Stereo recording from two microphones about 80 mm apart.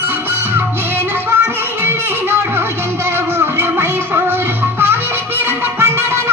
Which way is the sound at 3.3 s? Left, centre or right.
Right.